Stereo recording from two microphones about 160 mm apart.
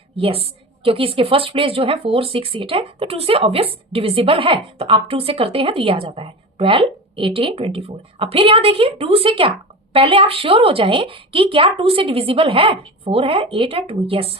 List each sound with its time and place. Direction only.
0.2 s a woman's voice: 35° right (ahead or behind)